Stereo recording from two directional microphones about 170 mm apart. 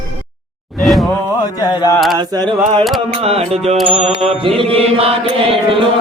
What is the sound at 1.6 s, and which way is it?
Mantra, 20° left (ahead or behind).